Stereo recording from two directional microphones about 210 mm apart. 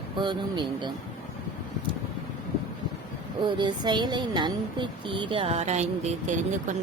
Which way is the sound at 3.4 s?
20° right (ahead or behind).